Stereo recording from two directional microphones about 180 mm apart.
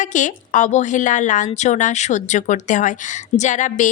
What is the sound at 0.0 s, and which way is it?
Speech, 45° left (ahead or behind).